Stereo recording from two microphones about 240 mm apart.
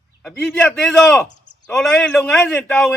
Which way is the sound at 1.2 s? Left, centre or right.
Left.